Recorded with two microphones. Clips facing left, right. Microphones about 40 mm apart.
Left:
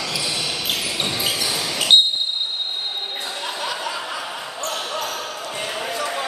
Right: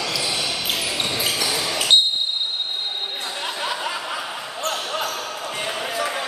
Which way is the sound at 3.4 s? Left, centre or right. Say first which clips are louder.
Right 1 dB; right.